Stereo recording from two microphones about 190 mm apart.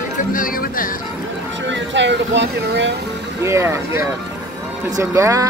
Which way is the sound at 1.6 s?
70° right (ahead or behind).